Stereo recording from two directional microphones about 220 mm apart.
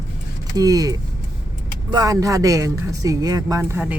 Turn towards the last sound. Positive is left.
turn(degrees=-10)  # may be behind; listen again after turning